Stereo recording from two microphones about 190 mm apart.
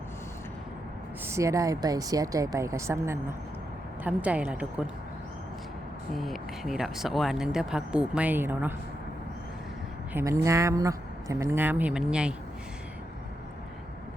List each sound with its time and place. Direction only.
1.2 s speech: 15° right (ahead or behind)
6.1 s speech: centre (ahead or behind)
10.1 s speech: 10° right (ahead or behind)